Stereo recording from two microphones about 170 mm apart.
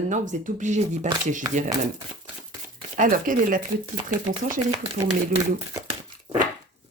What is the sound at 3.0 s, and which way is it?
Speech, 50° right (ahead or behind).